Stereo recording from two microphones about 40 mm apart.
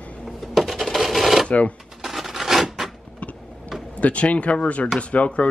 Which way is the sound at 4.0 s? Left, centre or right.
Left.